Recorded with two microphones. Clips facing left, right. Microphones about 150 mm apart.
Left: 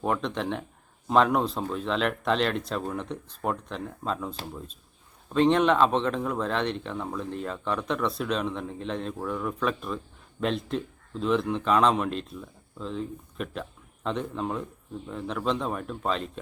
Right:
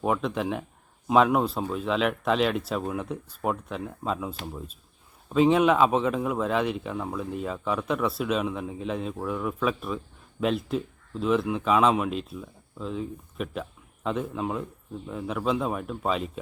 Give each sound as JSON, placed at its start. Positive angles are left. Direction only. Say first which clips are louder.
{"t": 0.0, "sound": "speech", "louder": "right 2 dB", "side_deg": -5}